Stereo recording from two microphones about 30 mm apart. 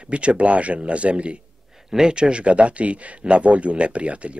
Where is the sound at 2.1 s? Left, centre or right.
Right.